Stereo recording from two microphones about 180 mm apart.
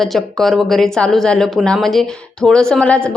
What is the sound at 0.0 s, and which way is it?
Speech, centre (ahead or behind).